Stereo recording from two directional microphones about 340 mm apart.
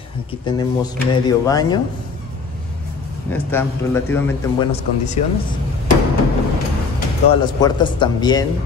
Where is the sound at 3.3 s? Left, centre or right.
Centre.